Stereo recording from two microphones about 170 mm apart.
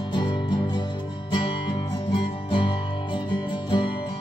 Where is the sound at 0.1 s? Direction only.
25° left (ahead or behind).